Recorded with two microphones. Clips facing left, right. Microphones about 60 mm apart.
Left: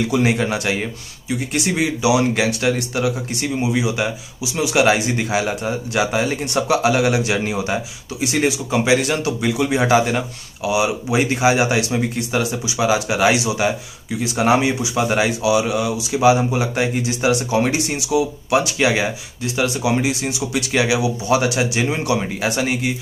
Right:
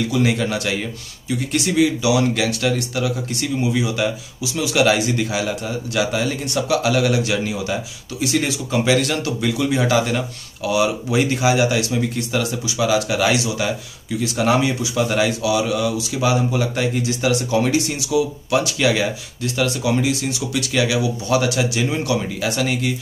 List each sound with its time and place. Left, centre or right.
0.1 s speech: left